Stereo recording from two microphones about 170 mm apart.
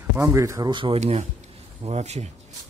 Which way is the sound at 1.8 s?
40° right (ahead or behind).